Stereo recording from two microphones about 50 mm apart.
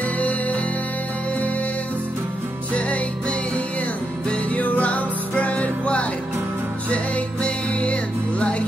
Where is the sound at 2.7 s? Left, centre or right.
Left.